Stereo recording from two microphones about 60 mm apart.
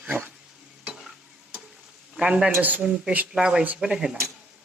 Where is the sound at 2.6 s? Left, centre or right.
Right.